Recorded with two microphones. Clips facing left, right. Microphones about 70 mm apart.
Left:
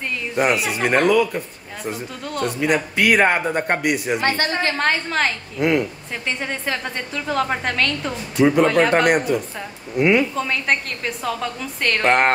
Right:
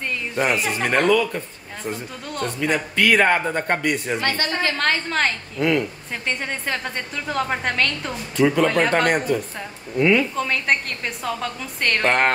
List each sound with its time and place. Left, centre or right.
0.5 s speech: centre
1.9 s a woman's voice: centre
2.6 s speech: centre
4.4 s a woman's voice: left
4.7 s speech: centre
5.6 s speech: centre
6.2 s a woman's voice: centre
8.4 s speech: centre
8.6 s a woman's voice: centre
9.0 s speech: centre
10.3 s a woman's voice: centre